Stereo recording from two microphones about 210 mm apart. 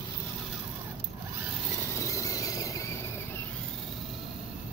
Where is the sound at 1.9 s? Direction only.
15° left (ahead or behind).